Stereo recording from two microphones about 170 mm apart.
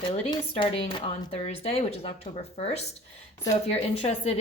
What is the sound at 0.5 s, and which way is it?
A woman's voice, 30° left (ahead or behind).